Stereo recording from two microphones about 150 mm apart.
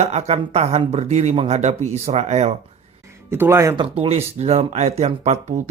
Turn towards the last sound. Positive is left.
turn(degrees=-45)  # may be behind; listen again after turning